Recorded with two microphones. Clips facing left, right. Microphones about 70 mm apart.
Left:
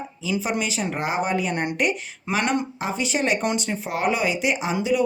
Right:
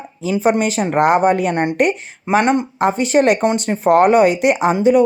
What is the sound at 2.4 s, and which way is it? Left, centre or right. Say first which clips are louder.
Speech: right 6 dB; right.